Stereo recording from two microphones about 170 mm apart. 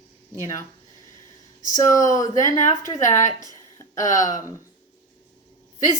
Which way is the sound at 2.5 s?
45° left (ahead or behind).